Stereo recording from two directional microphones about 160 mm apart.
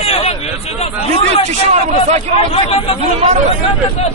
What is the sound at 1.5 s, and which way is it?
Speech, 45° right (ahead or behind).